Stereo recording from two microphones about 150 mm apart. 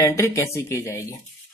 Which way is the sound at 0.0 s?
15° left (ahead or behind).